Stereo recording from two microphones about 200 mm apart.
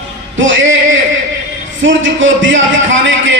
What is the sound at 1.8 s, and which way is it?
Speech, 70° right (ahead or behind).